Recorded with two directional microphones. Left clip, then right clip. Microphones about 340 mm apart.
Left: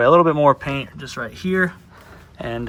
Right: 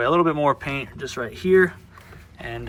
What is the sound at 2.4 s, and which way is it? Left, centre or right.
Speech, centre.